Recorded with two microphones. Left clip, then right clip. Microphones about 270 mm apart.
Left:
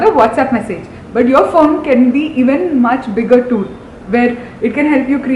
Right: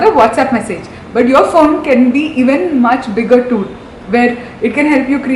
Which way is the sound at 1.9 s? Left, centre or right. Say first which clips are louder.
Right 1 dB; left.